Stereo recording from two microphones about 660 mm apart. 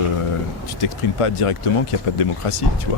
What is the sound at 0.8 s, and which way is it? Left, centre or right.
Speech, left.